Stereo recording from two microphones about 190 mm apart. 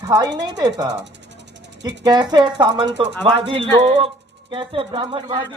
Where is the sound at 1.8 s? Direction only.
20° right (ahead or behind).